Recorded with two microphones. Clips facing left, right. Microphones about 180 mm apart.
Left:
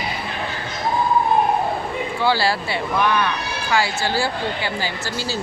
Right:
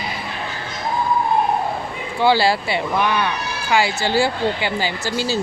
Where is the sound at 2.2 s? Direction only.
20° right (ahead or behind).